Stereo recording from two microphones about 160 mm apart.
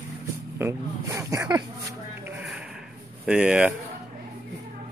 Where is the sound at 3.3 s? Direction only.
5° right (ahead or behind).